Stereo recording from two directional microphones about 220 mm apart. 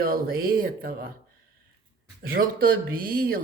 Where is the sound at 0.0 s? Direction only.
40° right (ahead or behind).